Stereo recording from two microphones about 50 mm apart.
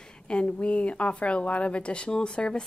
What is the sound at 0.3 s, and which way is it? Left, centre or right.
A woman's voice, left.